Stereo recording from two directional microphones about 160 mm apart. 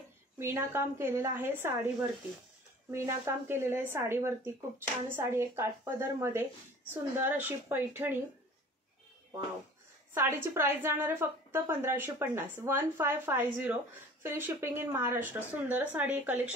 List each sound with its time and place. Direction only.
0.4 s a woman's voice: 15° right (ahead or behind)
10.1 s a woman's voice: 15° right (ahead or behind)